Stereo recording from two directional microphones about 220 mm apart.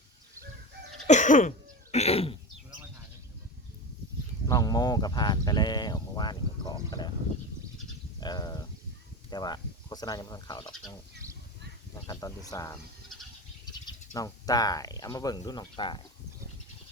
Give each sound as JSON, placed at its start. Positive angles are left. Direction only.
{"t": 1.0, "sound": "cough", "side_deg": 35}
{"t": 4.4, "sound": "speech", "side_deg": 15}
{"t": 8.2, "sound": "a sound", "side_deg": 20}
{"t": 9.3, "sound": "speech", "side_deg": 20}
{"t": 12.0, "sound": "speech", "side_deg": 15}
{"t": 13.8, "sound": "speech", "side_deg": 15}